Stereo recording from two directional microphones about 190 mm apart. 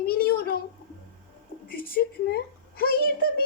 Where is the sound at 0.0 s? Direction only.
55° left (ahead or behind).